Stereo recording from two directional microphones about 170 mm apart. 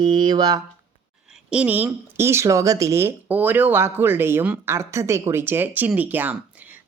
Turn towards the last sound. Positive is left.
turn(degrees=-10)  # may be behind; listen again after turning